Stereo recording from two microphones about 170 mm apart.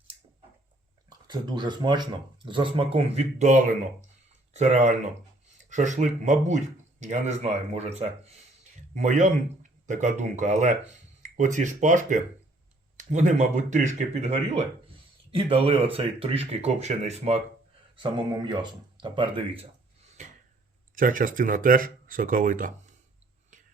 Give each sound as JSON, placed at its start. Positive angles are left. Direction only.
{"t": 1.3, "sound": "speech", "side_deg": -25}
{"t": 17.9, "sound": "speech", "side_deg": -30}
{"t": 20.9, "sound": "speech", "side_deg": -55}